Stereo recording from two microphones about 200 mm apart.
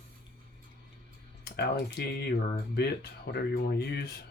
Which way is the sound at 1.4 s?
55° left (ahead or behind).